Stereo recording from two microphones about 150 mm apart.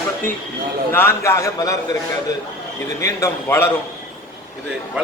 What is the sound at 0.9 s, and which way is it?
Speech, 15° left (ahead or behind).